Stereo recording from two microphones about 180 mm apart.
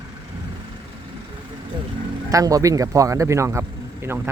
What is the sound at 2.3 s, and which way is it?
Speech, 20° right (ahead or behind).